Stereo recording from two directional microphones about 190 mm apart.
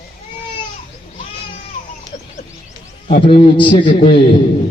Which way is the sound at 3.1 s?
30° left (ahead or behind).